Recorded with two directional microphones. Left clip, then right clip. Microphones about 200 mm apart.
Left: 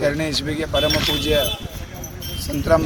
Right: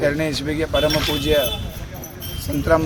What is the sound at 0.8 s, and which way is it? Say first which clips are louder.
Speech: left 1 dB; 20° right (ahead or behind).